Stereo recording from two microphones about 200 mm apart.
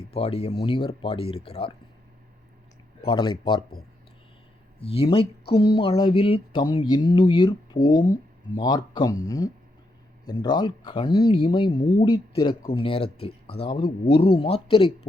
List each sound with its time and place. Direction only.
0.1 s speech: 30° left (ahead or behind)
3.1 s speech: 25° left (ahead or behind)
4.8 s speech: 30° left (ahead or behind)